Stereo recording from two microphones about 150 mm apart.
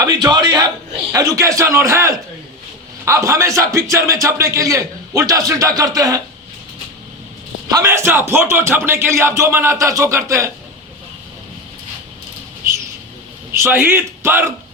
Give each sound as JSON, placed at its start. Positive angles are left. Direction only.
{"t": 0.0, "sound": "a man's voice", "side_deg": -25}
{"t": 7.7, "sound": "speech", "side_deg": -20}
{"t": 13.5, "sound": "speech", "side_deg": -15}